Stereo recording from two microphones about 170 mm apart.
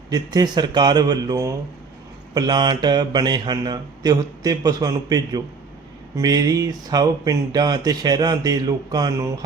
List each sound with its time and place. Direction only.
0.1 s speech: 25° right (ahead or behind)